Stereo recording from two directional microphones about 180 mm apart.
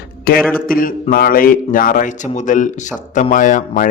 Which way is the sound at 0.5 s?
50° left (ahead or behind).